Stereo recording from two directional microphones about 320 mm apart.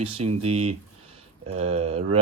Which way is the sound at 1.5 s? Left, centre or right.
Centre.